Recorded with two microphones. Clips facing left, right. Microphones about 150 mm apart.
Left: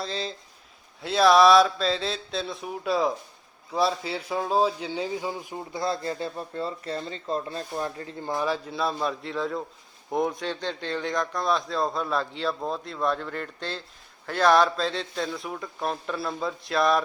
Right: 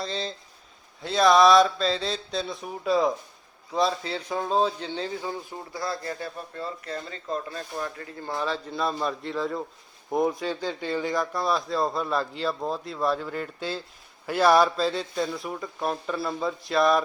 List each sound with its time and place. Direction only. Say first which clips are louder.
0.0 s a man's voice: even; centre (ahead or behind); by 8.1 s 25° left (ahead or behind)
8.2 s speech: left 2 dB; 15° left (ahead or behind); by 17.0 s centre (ahead or behind)